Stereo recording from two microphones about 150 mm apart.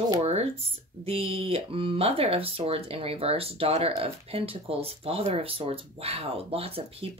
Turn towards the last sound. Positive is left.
turn(degrees=-40)  # may be behind; listen again after turning